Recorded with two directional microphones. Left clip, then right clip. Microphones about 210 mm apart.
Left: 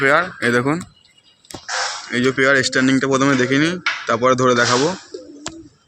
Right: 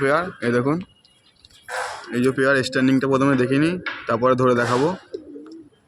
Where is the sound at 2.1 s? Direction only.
Centre (ahead or behind).